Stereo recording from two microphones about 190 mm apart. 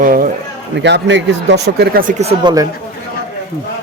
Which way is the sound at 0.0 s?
45° right (ahead or behind).